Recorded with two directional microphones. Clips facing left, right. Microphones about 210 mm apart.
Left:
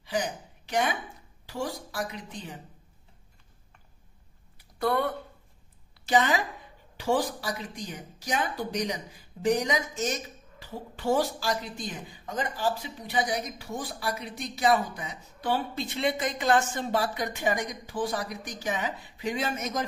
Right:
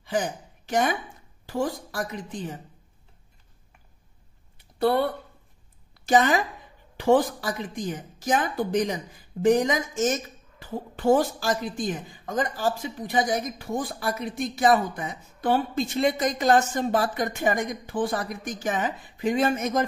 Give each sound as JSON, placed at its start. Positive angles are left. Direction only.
{"t": 0.0, "sound": "a woman's voice", "side_deg": -50}
{"t": 4.6, "sound": "a sound", "side_deg": -30}
{"t": 5.9, "sound": "a woman's voice", "side_deg": -45}